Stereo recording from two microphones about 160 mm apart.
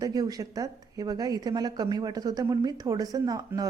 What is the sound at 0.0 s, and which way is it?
A woman's voice, 25° right (ahead or behind).